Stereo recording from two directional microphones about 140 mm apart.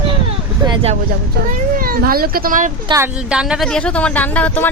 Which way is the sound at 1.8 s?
90° right.